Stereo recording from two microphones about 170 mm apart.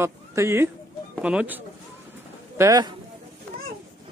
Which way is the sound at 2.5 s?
20° right (ahead or behind).